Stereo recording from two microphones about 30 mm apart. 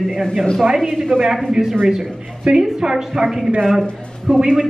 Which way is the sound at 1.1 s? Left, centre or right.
Centre.